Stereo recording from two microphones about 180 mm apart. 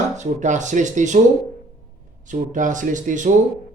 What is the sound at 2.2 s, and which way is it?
Speech, 45° right (ahead or behind).